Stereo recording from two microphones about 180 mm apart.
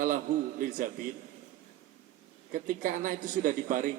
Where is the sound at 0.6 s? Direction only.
45° right (ahead or behind).